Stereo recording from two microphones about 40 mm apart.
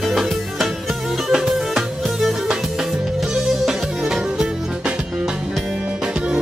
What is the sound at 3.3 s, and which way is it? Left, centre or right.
Music, centre.